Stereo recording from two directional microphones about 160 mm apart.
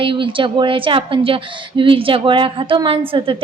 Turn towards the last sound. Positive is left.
turn(degrees=-35)  # may be behind; listen again after turning